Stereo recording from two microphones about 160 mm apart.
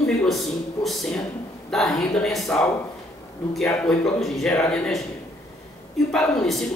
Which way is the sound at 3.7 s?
5° left (ahead or behind).